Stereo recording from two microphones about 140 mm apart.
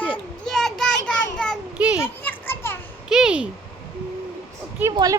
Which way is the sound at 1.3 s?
5° left (ahead or behind).